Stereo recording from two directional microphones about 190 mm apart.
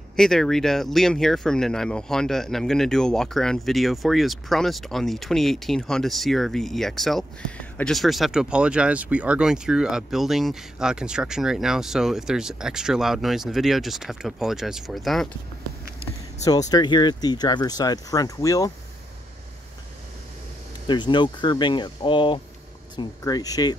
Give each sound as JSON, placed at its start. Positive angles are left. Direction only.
{"t": 0.1, "sound": "speech", "side_deg": 5}
{"t": 16.4, "sound": "speech", "side_deg": 20}
{"t": 20.8, "sound": "speech", "side_deg": 25}